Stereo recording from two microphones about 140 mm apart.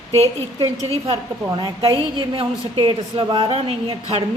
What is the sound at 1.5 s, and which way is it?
A woman's voice, 35° right (ahead or behind).